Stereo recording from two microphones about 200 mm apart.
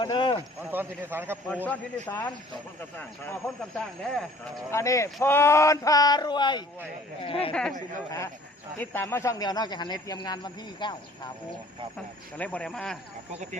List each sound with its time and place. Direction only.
0.0 s speech: 25° left (ahead or behind)
0.6 s a man's voice: 10° right (ahead or behind)
1.6 s speech: 10° left (ahead or behind)
4.7 s speech: 15° left (ahead or behind)
7.5 s speech: 5° left (ahead or behind)
8.8 s speech: 10° left (ahead or behind)
12.4 s speech: 5° left (ahead or behind)